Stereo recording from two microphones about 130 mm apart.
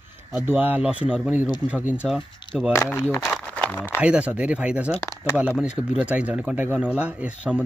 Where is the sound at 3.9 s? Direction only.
10° right (ahead or behind).